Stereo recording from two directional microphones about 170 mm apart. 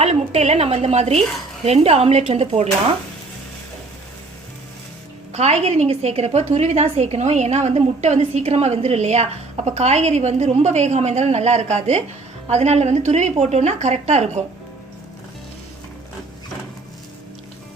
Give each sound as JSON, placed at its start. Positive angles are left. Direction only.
{"t": 0.0, "sound": "a woman's voice", "side_deg": -40}
{"t": 5.3, "sound": "a woman's voice", "side_deg": -40}